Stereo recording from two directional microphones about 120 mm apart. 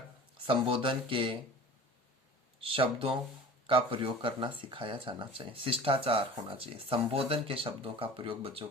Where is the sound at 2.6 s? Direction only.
50° right (ahead or behind).